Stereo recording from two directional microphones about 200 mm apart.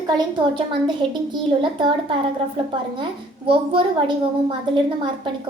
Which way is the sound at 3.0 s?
25° right (ahead or behind).